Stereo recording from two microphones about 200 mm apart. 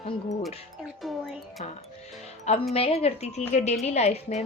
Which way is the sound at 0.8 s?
Centre (ahead or behind).